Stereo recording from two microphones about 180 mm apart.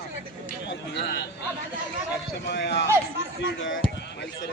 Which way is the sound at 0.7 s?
70° left (ahead or behind).